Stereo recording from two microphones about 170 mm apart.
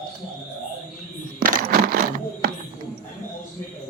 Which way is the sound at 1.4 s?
60° right (ahead or behind).